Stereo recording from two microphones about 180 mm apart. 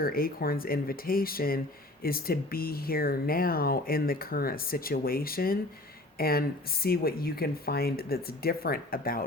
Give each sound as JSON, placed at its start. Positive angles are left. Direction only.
{"t": 0.0, "sound": "speech", "side_deg": 55}